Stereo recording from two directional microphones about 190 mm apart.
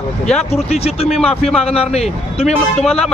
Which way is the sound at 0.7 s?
30° left (ahead or behind).